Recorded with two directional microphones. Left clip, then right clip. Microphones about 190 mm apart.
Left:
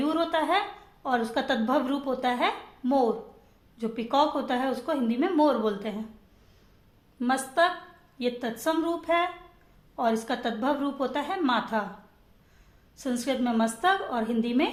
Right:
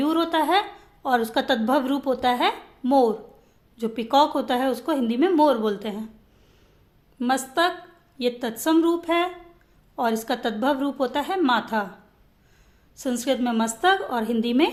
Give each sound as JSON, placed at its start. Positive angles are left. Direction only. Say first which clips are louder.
{"t": 0.0, "sound": "a sound", "louder": "right 4 dB", "side_deg": -30}
{"t": 1.0, "sound": "speech", "louder": "right 5 dB", "side_deg": -30}
{"t": 7.2, "sound": "speech", "louder": "right 2 dB", "side_deg": -30}
{"t": 13.0, "sound": "speech", "louder": "right 4 dB", "side_deg": -30}